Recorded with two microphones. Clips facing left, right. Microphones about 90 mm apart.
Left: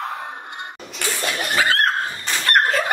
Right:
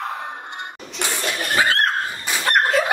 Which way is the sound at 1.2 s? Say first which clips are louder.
Left 1 dB; 20° left (ahead or behind).